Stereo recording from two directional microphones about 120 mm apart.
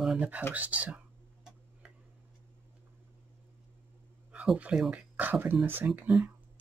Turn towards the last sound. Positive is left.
turn(degrees=-10)  # may be behind; listen again after turning